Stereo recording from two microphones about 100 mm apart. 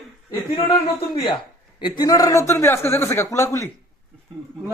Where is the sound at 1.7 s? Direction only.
50° left (ahead or behind).